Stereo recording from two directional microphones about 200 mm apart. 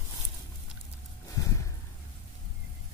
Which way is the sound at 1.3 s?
15° left (ahead or behind).